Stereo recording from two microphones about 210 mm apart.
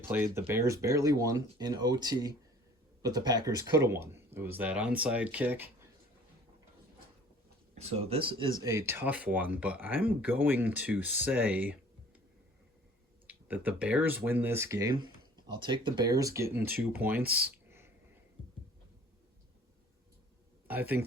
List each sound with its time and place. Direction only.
0.1 s speech: 10° right (ahead or behind)
7.8 s speech: 30° right (ahead or behind)
8.6 s speech: 10° right (ahead or behind)
13.2 s speech: 10° right (ahead or behind)
17.7 s a sound: 10° right (ahead or behind)
20.7 s speech: 10° right (ahead or behind)